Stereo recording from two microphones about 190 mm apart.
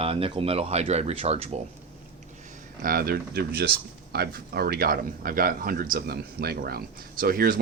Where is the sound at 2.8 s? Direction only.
50° right (ahead or behind).